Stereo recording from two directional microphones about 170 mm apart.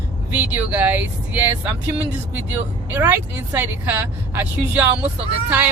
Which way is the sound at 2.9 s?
15° right (ahead or behind).